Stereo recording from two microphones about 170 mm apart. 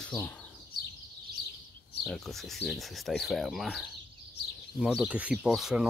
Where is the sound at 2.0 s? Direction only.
Centre (ahead or behind).